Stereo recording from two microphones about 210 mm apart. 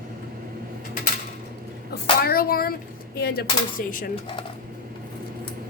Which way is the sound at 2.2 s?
45° left (ahead or behind).